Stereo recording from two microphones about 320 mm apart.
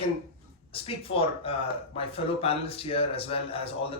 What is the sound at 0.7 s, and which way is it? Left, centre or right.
Speech, centre.